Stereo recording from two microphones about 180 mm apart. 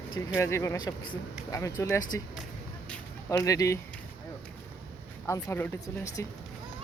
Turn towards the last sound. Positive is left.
turn(degrees=20)  # may be behind; listen again after turning